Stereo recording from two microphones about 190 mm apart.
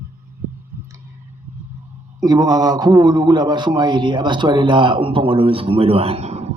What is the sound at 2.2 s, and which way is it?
A man's voice, 20° right (ahead or behind).